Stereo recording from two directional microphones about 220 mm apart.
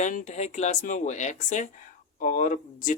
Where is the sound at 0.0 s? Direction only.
35° left (ahead or behind).